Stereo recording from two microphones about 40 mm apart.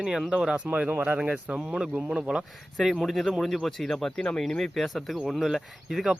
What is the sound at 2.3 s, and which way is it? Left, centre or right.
Speech, right.